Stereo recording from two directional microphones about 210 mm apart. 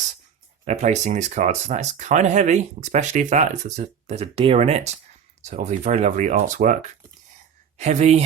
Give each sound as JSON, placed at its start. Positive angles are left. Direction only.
{"t": 0.6, "sound": "speech", "side_deg": -35}
{"t": 7.8, "sound": "speech", "side_deg": -30}